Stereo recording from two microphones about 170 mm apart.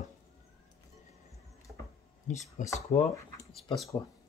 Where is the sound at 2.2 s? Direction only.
45° left (ahead or behind).